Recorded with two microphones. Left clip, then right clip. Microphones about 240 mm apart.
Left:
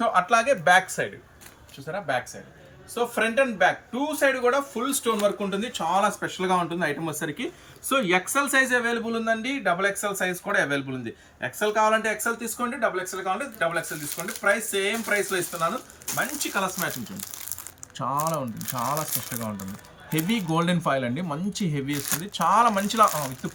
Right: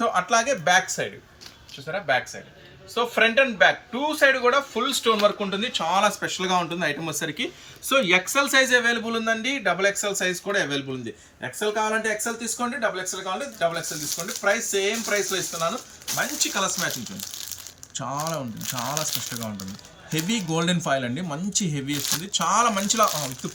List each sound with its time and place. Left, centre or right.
0.0 s speech: centre